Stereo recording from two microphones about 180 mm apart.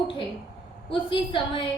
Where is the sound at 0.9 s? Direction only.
30° left (ahead or behind).